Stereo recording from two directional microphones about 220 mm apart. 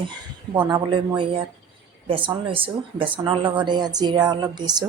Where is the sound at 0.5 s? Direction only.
20° right (ahead or behind).